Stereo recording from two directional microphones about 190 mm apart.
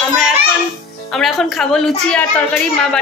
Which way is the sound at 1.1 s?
Centre (ahead or behind).